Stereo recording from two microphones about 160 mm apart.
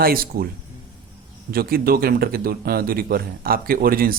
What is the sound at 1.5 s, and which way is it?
A man's voice, 70° right (ahead or behind).